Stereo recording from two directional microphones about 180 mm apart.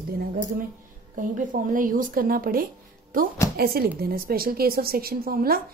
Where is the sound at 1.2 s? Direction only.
45° right (ahead or behind).